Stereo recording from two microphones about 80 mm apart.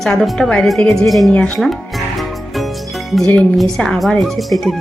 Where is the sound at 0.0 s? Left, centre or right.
Centre.